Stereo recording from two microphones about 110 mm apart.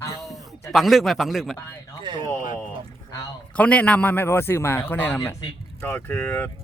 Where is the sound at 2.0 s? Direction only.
45° right (ahead or behind).